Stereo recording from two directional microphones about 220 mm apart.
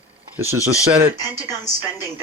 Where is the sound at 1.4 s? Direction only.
15° left (ahead or behind).